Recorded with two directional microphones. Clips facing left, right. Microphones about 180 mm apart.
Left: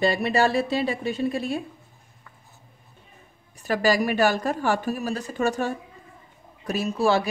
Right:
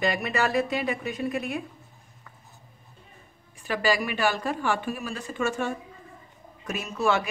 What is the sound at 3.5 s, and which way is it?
A woman's voice, 40° left (ahead or behind).